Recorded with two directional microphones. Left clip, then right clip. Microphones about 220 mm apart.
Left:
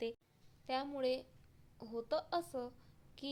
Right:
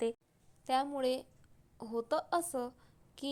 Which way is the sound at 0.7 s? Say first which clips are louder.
Right 5 dB; 20° right (ahead or behind).